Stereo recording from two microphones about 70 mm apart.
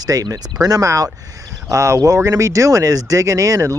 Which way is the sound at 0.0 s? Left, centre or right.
Right.